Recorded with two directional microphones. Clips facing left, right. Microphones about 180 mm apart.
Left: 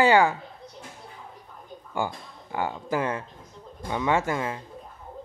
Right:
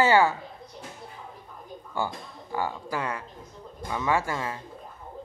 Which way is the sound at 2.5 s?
20° left (ahead or behind).